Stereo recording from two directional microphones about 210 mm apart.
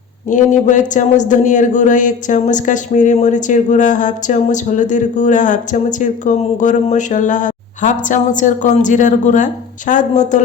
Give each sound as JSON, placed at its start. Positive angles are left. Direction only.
{"t": 0.3, "sound": "a man's voice", "side_deg": 35}